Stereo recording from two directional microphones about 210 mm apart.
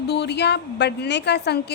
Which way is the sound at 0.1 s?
50° left (ahead or behind).